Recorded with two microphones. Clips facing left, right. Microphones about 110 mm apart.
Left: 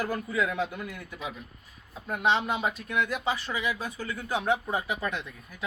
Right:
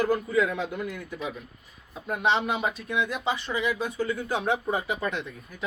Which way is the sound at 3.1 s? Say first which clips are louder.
Right 1 dB; 5° left (ahead or behind).